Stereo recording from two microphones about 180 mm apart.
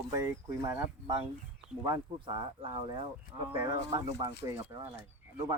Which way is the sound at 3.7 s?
75° left (ahead or behind).